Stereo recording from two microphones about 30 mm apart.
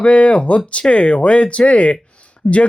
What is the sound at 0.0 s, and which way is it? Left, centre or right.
Speech, left.